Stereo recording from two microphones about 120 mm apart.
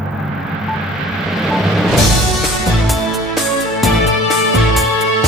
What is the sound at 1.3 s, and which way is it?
Vehicle, centre (ahead or behind).